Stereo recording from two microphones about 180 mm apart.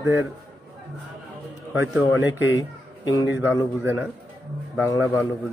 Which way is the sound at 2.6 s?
20° left (ahead or behind).